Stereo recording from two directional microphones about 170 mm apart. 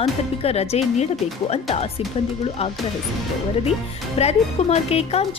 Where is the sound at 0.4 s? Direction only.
35° left (ahead or behind).